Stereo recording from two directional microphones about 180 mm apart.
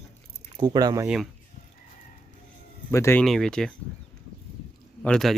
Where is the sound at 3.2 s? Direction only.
Centre (ahead or behind).